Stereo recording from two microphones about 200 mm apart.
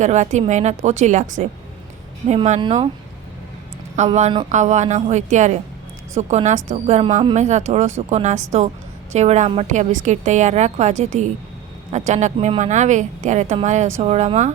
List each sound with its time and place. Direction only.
0.0 s a woman's voice: 35° right (ahead or behind)
3.9 s a woman's voice: 35° right (ahead or behind)